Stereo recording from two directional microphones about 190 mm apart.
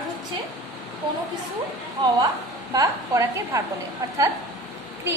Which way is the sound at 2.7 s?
15° right (ahead or behind).